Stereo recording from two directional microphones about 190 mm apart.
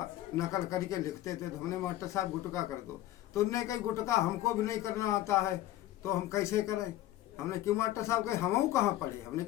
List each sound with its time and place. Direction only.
0.3 s speech: 15° left (ahead or behind)